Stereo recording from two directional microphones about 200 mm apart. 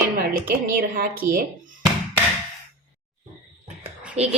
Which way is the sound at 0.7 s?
45° right (ahead or behind).